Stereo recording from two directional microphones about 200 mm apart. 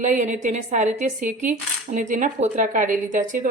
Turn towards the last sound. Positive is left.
turn(degrees=-40)  # may be behind; listen again after turning